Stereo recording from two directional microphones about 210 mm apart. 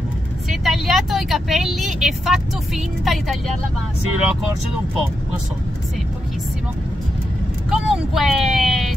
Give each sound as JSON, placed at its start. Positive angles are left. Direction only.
{"t": 0.5, "sound": "speech", "side_deg": 0}
{"t": 7.7, "sound": "speech", "side_deg": 0}